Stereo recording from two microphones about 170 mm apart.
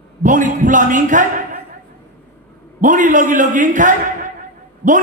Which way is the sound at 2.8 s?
50° right (ahead or behind).